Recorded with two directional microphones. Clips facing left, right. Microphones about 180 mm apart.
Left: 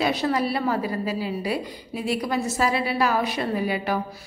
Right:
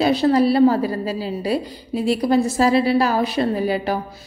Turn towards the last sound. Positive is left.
turn(degrees=-35)  # may be behind; listen again after turning